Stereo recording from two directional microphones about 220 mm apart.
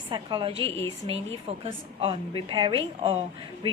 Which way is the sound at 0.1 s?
20° right (ahead or behind).